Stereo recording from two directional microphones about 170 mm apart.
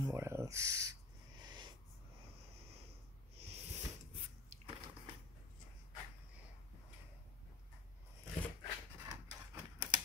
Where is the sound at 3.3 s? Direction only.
40° right (ahead or behind).